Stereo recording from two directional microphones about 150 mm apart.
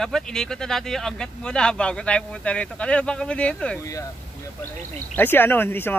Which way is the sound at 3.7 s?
20° left (ahead or behind).